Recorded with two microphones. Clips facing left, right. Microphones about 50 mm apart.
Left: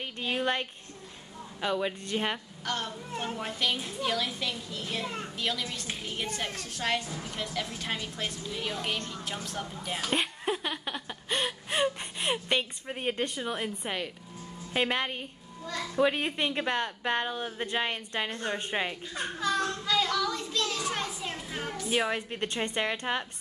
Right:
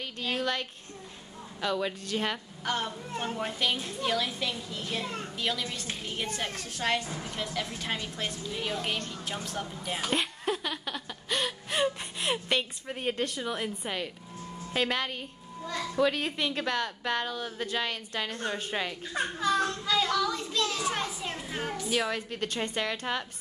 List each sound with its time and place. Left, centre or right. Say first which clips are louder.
0.0 s a woman's voice: left 1 dB; left
2.6 s speech: right 3 dB; centre
3.1 s a child's voice: right 1 dB; centre
5.0 s a woman's voice: even; centre
5.4 s a child's voice: right 1 dB; centre
10.4 s a sound: even; centre
11.8 s a woman's voice: even; centre
14.7 s speech: left 1 dB; left
19.4 s a child's voice: right 1 dB; centre
21.8 s speech: left 2 dB; left